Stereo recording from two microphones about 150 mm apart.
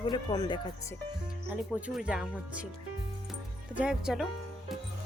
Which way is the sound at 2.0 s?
5° right (ahead or behind).